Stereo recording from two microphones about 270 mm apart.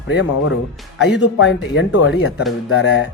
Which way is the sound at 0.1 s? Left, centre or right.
Left.